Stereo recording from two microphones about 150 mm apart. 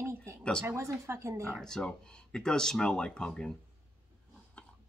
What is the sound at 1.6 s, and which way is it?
Speech, 5° left (ahead or behind).